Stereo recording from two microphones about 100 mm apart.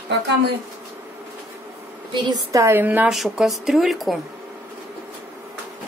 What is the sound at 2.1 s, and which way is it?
Speech, 50° right (ahead or behind).